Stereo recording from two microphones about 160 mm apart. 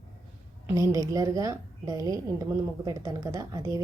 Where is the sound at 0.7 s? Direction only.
20° right (ahead or behind).